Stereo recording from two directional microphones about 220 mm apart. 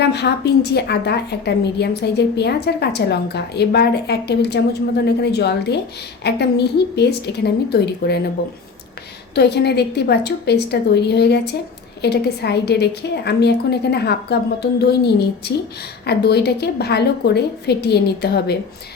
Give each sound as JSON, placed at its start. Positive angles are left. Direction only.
{"t": 0.0, "sound": "a woman's voice", "side_deg": 50}
{"t": 9.3, "sound": "a woman's voice", "side_deg": 50}